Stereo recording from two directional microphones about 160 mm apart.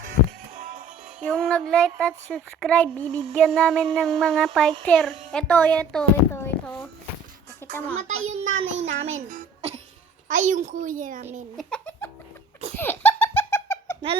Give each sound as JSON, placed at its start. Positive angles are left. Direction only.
{"t": 0.5, "sound": "music", "side_deg": -50}
{"t": 1.2, "sound": "a child's voice", "side_deg": 5}
{"t": 7.6, "sound": "a sound", "side_deg": 15}
{"t": 7.9, "sound": "a child's voice", "side_deg": -45}
{"t": 11.5, "sound": "giggle", "side_deg": 5}
{"t": 12.7, "sound": "laughter", "side_deg": 10}